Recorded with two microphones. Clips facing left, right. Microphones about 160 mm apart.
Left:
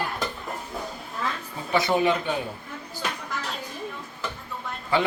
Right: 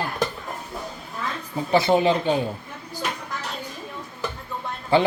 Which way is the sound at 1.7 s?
30° right (ahead or behind).